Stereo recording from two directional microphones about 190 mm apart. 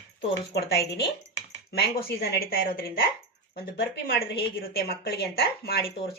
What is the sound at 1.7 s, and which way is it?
A woman's voice, 55° left (ahead or behind).